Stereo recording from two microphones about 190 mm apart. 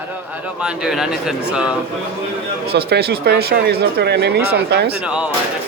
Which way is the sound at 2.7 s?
60° right (ahead or behind).